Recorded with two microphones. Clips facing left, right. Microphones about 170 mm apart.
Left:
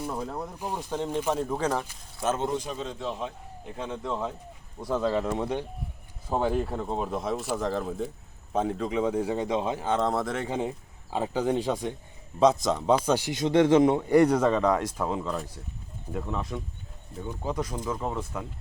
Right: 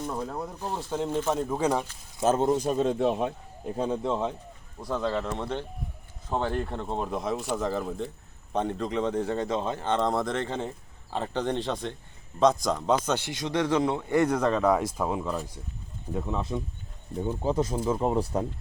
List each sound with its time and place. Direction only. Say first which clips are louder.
0.0 s a man's voice: even; 5° left (ahead or behind)
0.9 s speech: right 1 dB; 5° right (ahead or behind)
2.2 s a man's voice: right 5 dB; 35° right (ahead or behind); by 3.3 s 60° right (ahead or behind)
4.0 s speech: right 3 dB; 25° right (ahead or behind)
4.8 s a man's voice: left 2 dB; 5° left (ahead or behind)
13.4 s speech: left 7 dB; 20° left (ahead or behind); by 16.4 s 15° right (ahead or behind)
16.4 s speech: right 3 dB; 25° right (ahead or behind)